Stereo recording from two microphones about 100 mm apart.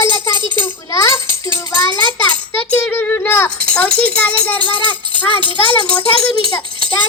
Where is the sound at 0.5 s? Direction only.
25° left (ahead or behind).